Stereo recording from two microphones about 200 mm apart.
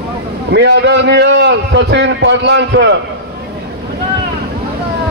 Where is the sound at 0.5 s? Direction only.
60° right (ahead or behind).